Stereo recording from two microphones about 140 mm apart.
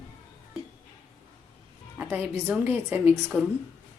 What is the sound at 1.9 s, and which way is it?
A woman's voice, 10° right (ahead or behind).